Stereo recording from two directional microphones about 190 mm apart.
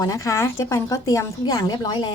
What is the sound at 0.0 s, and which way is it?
A woman's voice, 15° left (ahead or behind).